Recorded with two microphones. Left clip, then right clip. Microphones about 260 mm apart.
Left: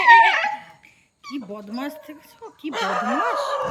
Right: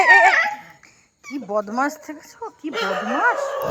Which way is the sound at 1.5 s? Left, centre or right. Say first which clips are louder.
Right 14 dB; centre.